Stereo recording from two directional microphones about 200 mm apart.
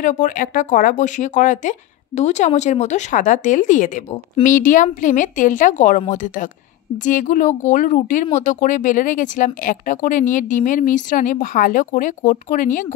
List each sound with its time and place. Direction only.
0.0 s speech: 40° left (ahead or behind)